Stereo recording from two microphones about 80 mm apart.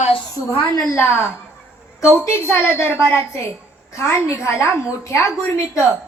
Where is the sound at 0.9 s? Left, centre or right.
Left.